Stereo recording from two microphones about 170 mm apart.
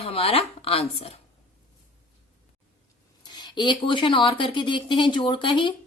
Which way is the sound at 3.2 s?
25° left (ahead or behind).